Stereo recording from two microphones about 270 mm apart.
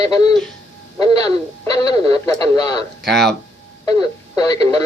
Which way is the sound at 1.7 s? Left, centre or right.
Centre.